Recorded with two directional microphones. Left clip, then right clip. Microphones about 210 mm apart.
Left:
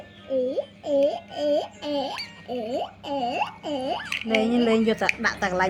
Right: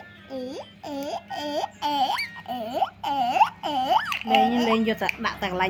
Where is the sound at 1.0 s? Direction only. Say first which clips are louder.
Left 7 dB; 40° right (ahead or behind).